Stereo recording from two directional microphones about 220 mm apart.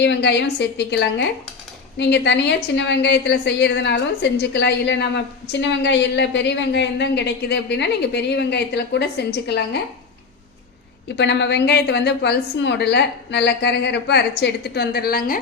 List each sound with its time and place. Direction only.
0.0 s a woman's voice: 50° left (ahead or behind)
11.2 s a woman's voice: 50° left (ahead or behind)